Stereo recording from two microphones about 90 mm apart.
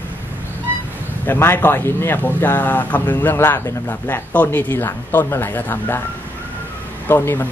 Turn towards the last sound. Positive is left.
turn(degrees=25)  # may be behind; listen again after turning